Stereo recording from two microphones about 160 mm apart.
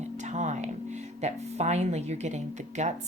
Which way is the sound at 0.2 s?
50° right (ahead or behind).